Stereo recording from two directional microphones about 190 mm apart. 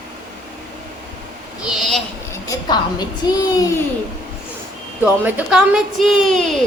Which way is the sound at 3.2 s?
20° left (ahead or behind).